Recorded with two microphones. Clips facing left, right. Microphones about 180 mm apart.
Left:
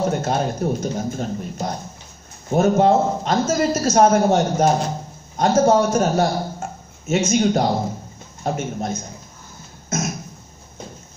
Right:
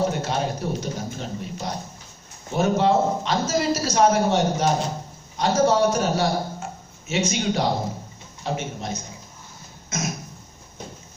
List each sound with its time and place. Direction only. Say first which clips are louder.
0.2 s a man's voice: left 4 dB; 45° left (ahead or behind)